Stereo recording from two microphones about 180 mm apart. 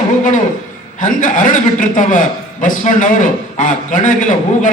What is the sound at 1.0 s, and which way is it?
A man's voice, 45° left (ahead or behind).